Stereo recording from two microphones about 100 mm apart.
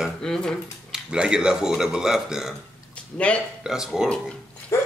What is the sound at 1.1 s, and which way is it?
Speech, 10° right (ahead or behind).